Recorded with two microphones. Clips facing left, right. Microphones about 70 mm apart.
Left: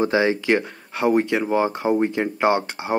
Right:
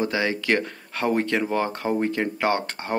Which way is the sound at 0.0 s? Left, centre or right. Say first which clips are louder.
Left 5 dB; left.